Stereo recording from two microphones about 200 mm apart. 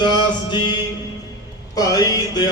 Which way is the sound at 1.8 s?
15° left (ahead or behind).